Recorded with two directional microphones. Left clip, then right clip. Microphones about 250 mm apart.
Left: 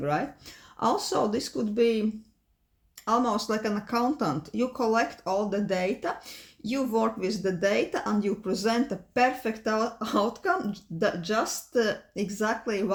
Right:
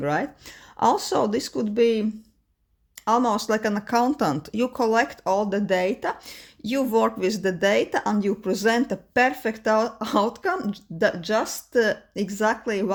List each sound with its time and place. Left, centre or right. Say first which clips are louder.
0.0 s speech: right 3 dB; right